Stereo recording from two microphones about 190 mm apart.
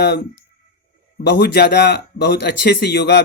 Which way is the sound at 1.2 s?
60° left (ahead or behind).